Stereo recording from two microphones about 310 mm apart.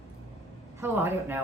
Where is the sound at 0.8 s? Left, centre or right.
Centre.